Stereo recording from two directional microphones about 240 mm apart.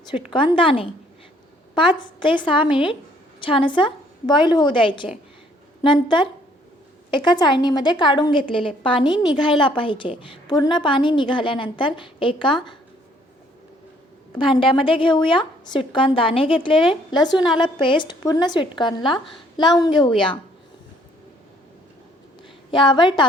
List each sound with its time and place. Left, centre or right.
0.3 s a woman's voice: left
14.3 s a woman's voice: left
22.7 s a woman's voice: centre